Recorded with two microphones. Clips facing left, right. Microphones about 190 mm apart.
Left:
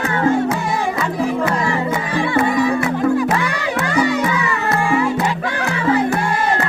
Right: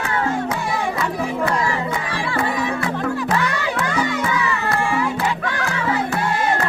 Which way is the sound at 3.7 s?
15° left (ahead or behind).